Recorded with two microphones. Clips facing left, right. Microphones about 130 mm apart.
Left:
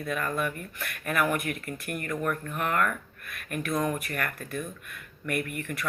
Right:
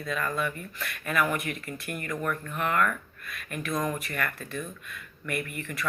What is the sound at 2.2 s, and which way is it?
Speech, 40° left (ahead or behind).